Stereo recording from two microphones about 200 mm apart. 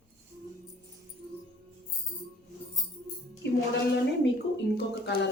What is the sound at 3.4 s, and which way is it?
Music, 55° left (ahead or behind).